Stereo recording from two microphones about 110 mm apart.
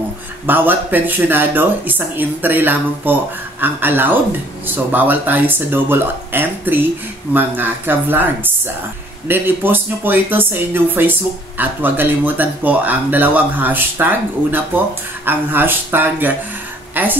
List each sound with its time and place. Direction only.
0.5 s speech: 20° right (ahead or behind)
9.3 s a woman's voice: 20° right (ahead or behind)